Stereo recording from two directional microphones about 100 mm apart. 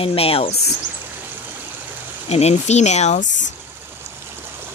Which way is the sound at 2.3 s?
90° left.